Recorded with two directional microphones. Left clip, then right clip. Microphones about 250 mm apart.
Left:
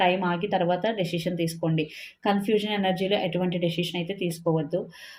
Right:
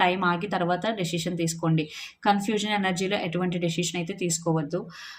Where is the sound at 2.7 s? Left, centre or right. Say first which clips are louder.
Left 1 dB; right.